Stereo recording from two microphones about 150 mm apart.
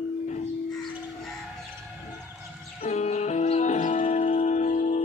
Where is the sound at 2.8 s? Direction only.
50° left (ahead or behind).